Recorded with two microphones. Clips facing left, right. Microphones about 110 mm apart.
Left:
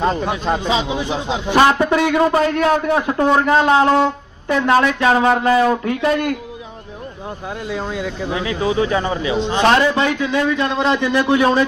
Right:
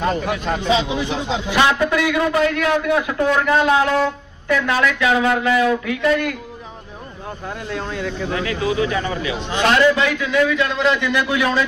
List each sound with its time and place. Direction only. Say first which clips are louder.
0.0 s a man's voice: left 2 dB; 25° left (ahead or behind)
1.5 s a man's voice: left 4 dB; 40° left (ahead or behind)
7.4 s speech: left 2 dB; 5° left (ahead or behind)
8.3 s a man's voice: left 2 dB; 20° left (ahead or behind)